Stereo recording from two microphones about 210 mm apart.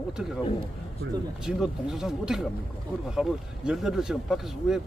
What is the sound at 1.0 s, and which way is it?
Speech, 60° right (ahead or behind).